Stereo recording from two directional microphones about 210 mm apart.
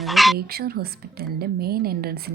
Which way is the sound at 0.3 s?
45° right (ahead or behind).